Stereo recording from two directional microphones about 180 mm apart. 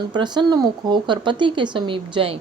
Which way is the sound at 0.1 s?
25° right (ahead or behind).